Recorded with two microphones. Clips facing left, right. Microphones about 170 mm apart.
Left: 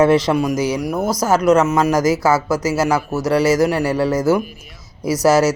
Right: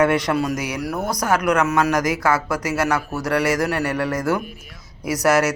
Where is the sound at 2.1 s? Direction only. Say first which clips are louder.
Left 4 dB; 5° left (ahead or behind).